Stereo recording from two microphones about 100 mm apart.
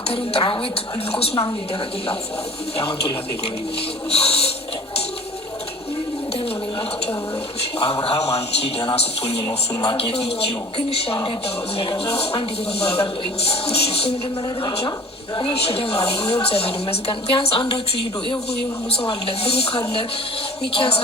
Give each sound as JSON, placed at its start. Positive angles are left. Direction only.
{"t": 0.1, "sound": "a woman's voice", "side_deg": 65}
{"t": 1.1, "sound": "speech", "side_deg": 75}
{"t": 4.1, "sound": "a sound", "side_deg": 85}
{"t": 8.0, "sound": "a sound", "side_deg": 85}
{"t": 9.5, "sound": "speech", "side_deg": 60}
{"t": 11.2, "sound": "speech", "side_deg": 65}
{"t": 15.4, "sound": "speech", "side_deg": 65}
{"t": 18.9, "sound": "a woman's voice", "side_deg": 70}